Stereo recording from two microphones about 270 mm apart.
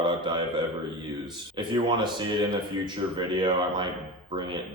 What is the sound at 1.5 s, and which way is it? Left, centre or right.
Speech, centre.